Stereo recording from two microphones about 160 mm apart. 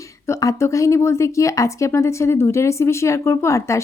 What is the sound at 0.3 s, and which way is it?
A woman's voice, 20° left (ahead or behind).